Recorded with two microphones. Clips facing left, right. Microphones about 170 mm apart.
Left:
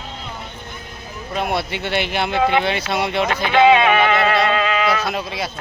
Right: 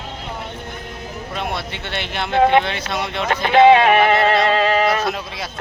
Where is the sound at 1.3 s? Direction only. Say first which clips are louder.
Left 5 dB; 5° left (ahead or behind).